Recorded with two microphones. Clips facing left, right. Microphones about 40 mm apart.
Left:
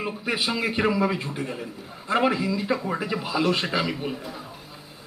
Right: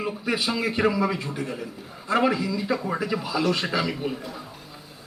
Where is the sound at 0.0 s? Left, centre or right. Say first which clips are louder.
Right 1 dB; centre.